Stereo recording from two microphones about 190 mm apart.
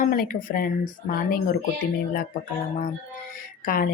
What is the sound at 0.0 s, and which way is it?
Speech, 45° left (ahead or behind).